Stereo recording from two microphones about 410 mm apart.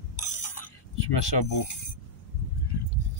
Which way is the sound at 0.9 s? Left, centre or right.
Left.